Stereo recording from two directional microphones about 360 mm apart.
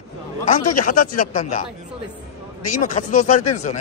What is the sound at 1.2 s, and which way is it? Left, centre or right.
Speech, left.